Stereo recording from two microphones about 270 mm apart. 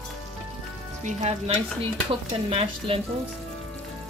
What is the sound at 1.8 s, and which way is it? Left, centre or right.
Stir, right.